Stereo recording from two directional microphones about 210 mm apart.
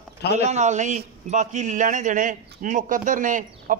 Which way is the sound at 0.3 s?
35° right (ahead or behind).